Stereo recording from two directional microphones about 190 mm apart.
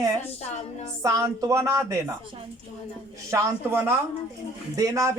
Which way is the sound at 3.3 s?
15° right (ahead or behind).